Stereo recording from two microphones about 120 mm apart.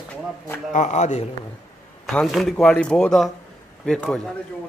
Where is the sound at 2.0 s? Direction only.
Centre (ahead or behind).